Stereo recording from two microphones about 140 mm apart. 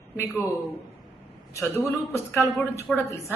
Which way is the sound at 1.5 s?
20° left (ahead or behind).